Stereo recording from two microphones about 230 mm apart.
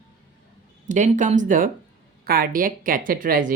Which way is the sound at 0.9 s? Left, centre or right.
Right.